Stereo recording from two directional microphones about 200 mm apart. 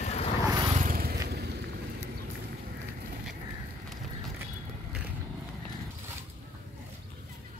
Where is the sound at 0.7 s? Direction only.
45° right (ahead or behind).